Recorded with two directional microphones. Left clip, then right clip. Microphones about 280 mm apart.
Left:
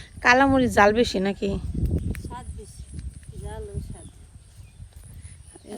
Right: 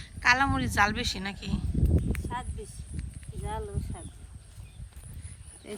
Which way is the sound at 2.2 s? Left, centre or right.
Right.